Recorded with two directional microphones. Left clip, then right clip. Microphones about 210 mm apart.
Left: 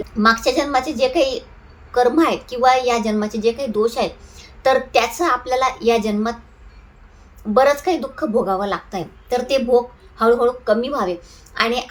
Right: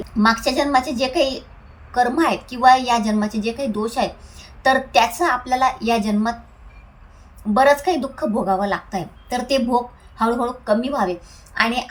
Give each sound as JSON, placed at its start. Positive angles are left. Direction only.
{"t": 0.0, "sound": "a woman's voice", "side_deg": 5}
{"t": 7.5, "sound": "a woman's voice", "side_deg": 0}